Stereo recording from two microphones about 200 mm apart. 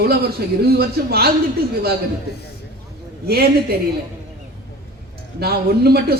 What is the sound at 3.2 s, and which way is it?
Speech, 50° right (ahead or behind).